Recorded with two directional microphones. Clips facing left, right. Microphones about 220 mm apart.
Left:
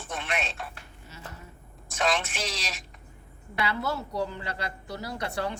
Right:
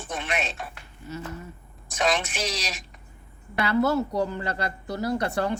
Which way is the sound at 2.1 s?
15° right (ahead or behind).